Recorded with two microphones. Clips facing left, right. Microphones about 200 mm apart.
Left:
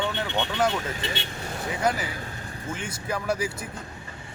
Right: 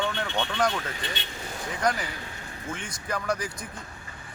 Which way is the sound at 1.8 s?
5° left (ahead or behind).